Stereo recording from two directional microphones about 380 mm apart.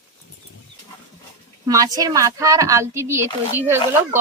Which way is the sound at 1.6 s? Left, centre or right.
Centre.